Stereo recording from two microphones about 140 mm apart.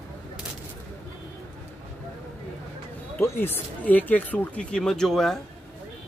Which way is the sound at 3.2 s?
15° left (ahead or behind).